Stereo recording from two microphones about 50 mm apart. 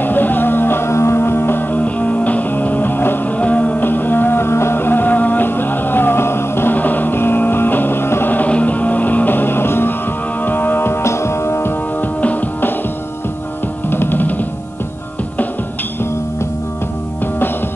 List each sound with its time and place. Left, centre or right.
0.0 s music: left
3.3 s music: left
3.8 s music: left
6.7 s music: left
8.5 s music: left
12.0 s music: left
13.8 s music: left